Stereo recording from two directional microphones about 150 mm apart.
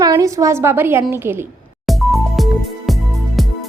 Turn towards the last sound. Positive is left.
turn(degrees=0)  # may be behind; listen again after turning